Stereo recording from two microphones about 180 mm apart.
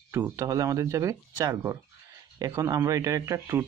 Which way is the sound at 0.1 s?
15° right (ahead or behind).